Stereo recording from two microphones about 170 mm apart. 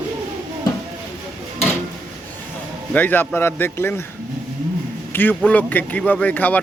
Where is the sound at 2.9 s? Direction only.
10° left (ahead or behind).